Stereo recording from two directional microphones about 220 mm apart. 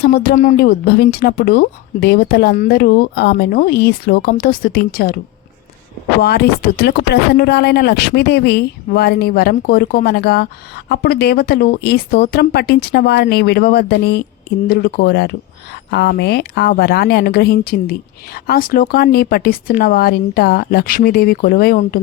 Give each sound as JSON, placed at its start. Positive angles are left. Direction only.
{"t": 0.0, "sound": "speech", "side_deg": 45}
{"t": 6.2, "sound": "speech", "side_deg": 45}